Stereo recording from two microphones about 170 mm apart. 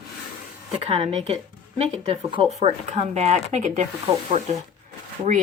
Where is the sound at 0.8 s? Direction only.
35° right (ahead or behind).